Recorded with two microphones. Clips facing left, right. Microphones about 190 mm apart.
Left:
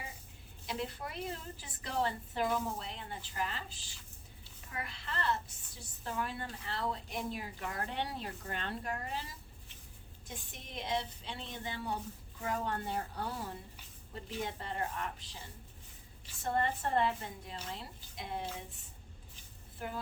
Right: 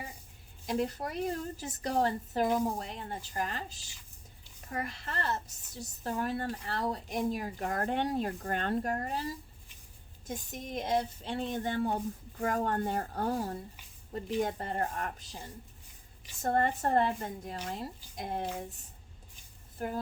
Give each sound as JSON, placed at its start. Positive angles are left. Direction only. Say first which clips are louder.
{"t": 0.7, "sound": "a woman's voice", "louder": "right 7 dB", "side_deg": -45}
{"t": 10.2, "sound": "a woman's voice", "louder": "right 10 dB", "side_deg": -40}
{"t": 16.4, "sound": "a woman's voice", "louder": "right 5 dB", "side_deg": -45}